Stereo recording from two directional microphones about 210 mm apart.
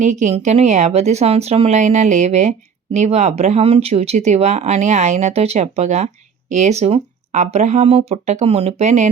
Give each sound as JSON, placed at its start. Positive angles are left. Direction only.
{"t": 0.0, "sound": "speech", "side_deg": -35}